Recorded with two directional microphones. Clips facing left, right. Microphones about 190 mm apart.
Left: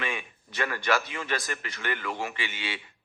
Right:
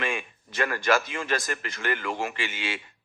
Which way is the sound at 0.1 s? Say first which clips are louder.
Right 3 dB; 45° right (ahead or behind).